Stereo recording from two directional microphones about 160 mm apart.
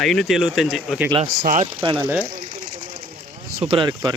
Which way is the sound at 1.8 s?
30° right (ahead or behind).